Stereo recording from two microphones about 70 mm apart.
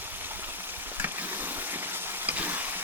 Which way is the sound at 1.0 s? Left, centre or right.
Right.